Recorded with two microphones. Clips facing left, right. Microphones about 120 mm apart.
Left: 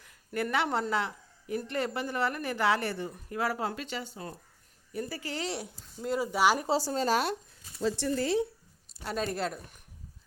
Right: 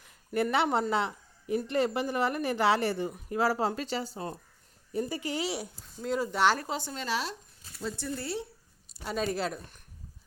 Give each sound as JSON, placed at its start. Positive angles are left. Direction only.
{"t": 0.5, "sound": "a woman's voice", "side_deg": -20}
{"t": 4.9, "sound": "speech", "side_deg": -20}
{"t": 6.7, "sound": "speech", "side_deg": 35}
{"t": 7.9, "sound": "speech", "side_deg": 90}
{"t": 8.9, "sound": "speech", "side_deg": 0}